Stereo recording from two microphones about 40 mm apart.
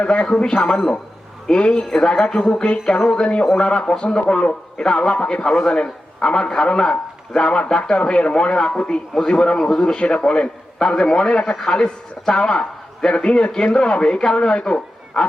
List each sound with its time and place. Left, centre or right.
0.0 s a man's voice: left
4.8 s a man's voice: left